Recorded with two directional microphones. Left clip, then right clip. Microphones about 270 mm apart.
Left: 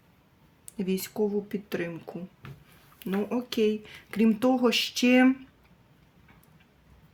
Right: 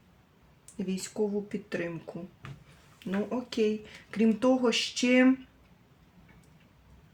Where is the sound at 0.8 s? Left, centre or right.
Left.